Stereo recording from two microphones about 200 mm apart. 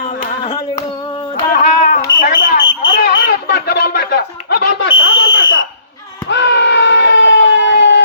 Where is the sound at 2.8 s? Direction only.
70° left (ahead or behind); by 4.2 s 55° left (ahead or behind).